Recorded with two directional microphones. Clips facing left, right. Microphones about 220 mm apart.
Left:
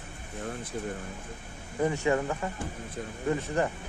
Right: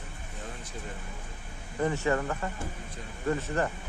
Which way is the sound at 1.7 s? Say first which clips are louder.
Left 1 dB; 10° left (ahead or behind).